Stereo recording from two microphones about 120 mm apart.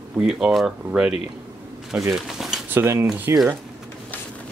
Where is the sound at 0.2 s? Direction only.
5° right (ahead or behind).